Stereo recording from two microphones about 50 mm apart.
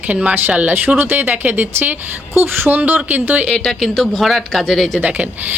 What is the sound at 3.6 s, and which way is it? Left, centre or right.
Speech, centre.